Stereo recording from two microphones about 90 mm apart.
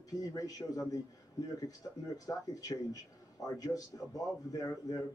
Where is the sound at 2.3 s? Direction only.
40° left (ahead or behind).